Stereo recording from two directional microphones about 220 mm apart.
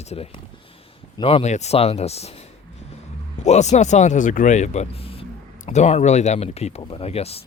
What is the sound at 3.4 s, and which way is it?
Speech, 30° left (ahead or behind).